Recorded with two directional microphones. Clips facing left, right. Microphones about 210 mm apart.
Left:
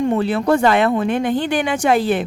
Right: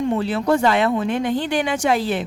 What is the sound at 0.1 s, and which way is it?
Speech, 55° left (ahead or behind).